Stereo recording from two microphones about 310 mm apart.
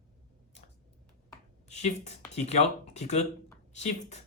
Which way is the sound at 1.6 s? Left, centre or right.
Left.